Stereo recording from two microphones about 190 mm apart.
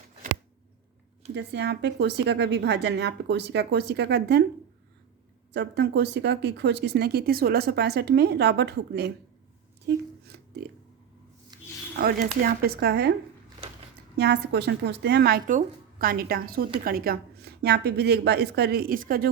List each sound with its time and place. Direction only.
1.3 s speech: 65° right (ahead or behind)
5.5 s speech: 65° right (ahead or behind)
9.8 s a sound: 60° right (ahead or behind)
11.5 s a sound: 20° right (ahead or behind)
11.9 s speech: 50° right (ahead or behind)
14.2 s speech: 60° right (ahead or behind)
15.4 s a woman's voice: 45° right (ahead or behind)